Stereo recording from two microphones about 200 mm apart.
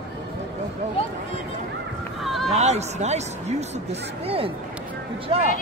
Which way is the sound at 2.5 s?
35° right (ahead or behind).